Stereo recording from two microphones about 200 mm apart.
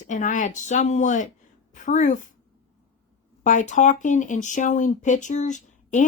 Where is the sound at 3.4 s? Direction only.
40° left (ahead or behind).